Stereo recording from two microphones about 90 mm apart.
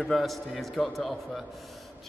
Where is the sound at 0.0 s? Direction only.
Centre (ahead or behind).